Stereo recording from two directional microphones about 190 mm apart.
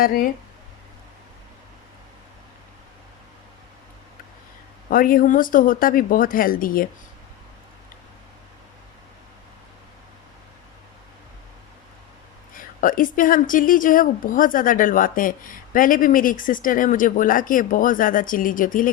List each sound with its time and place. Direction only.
0.0 s a woman's voice: 50° left (ahead or behind)
4.9 s a woman's voice: 45° left (ahead or behind)
12.5 s a woman's voice: 45° left (ahead or behind)